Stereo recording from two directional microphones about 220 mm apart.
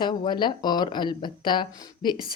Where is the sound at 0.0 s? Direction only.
20° left (ahead or behind).